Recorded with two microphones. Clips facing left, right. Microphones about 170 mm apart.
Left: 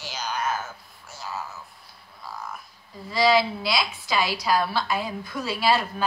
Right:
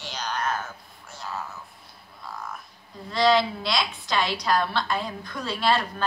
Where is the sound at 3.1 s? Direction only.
5° left (ahead or behind).